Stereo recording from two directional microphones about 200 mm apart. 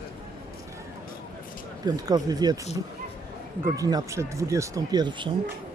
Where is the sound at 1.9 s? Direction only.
20° right (ahead or behind).